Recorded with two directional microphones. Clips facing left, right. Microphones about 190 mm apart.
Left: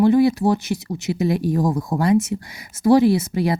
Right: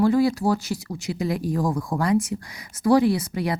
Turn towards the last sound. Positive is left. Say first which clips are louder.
# left 5 dB
turn(degrees=25)  # may be behind; listen again after turning